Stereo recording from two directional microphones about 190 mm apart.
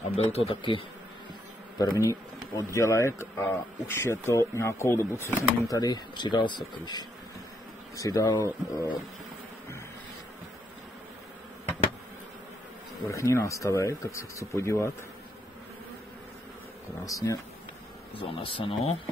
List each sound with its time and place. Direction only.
0.1 s speech: 30° left (ahead or behind)
13.0 s speech: 15° left (ahead or behind)
17.0 s speech: 20° left (ahead or behind)
18.1 s speech: 30° left (ahead or behind)